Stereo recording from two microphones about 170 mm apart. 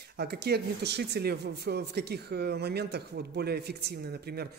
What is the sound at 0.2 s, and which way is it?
Speech, 70° right (ahead or behind).